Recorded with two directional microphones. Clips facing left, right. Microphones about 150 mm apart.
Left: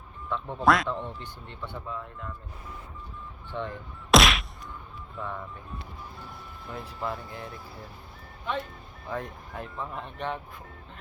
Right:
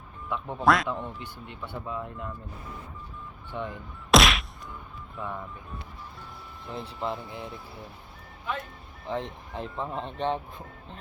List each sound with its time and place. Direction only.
0.3 s speech: 15° right (ahead or behind)
0.6 s a man's voice: centre (ahead or behind); by 2.3 s 20° right (ahead or behind)
3.5 s speech: 15° right (ahead or behind)
4.1 s whack: centre (ahead or behind)
5.1 s a man's voice: 5° right (ahead or behind)
6.7 s speech: 25° right (ahead or behind)
9.0 s speech: 20° right (ahead or behind)